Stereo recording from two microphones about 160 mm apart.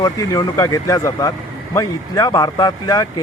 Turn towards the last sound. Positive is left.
turn(degrees=25)  # may be behind; listen again after turning